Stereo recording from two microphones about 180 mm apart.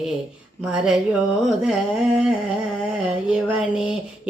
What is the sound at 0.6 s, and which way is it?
Speech, 5° right (ahead or behind).